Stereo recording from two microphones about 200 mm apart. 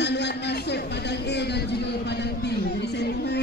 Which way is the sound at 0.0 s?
55° left (ahead or behind).